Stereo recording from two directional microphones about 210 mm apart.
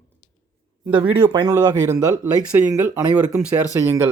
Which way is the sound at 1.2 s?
20° right (ahead or behind).